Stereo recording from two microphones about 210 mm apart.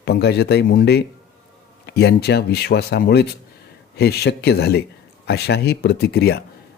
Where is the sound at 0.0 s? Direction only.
50° left (ahead or behind).